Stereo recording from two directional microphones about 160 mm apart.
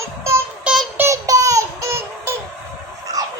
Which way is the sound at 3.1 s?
20° right (ahead or behind).